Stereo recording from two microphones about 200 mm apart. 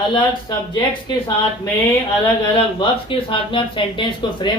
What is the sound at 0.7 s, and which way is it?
Speech, 20° left (ahead or behind).